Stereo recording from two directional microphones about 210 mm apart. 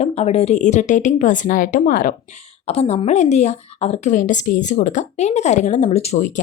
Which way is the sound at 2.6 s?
30° left (ahead or behind).